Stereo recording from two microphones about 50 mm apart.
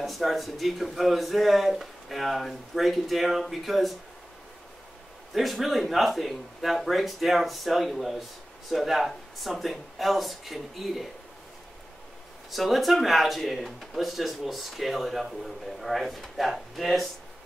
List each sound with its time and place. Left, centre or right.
0.0 s speech: centre
5.3 s speech: centre
12.4 s speech: centre